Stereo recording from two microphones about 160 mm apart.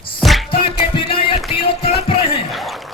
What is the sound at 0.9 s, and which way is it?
Music, 35° left (ahead or behind).